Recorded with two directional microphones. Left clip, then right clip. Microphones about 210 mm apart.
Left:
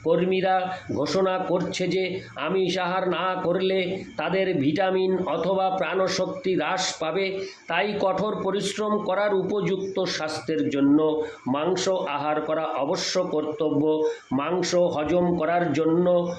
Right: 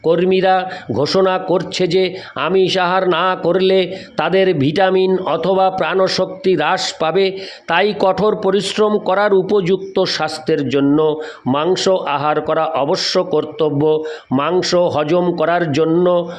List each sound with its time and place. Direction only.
0.0 s a man's voice: 50° right (ahead or behind)